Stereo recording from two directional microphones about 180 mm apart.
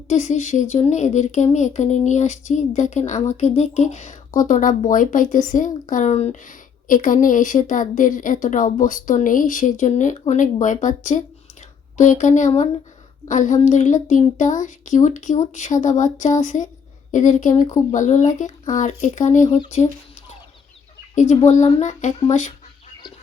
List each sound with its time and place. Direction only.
0.1 s speech: 40° left (ahead or behind)
21.2 s speech: 40° left (ahead or behind)